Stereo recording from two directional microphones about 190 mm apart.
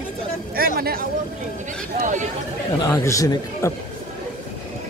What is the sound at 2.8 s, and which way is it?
Speech, 15° left (ahead or behind).